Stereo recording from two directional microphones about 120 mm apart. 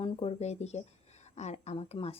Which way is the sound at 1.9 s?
55° left (ahead or behind).